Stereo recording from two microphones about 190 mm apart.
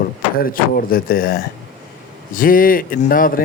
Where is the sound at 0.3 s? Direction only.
50° left (ahead or behind).